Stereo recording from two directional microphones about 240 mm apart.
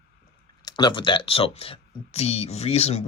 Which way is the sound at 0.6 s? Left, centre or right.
Centre.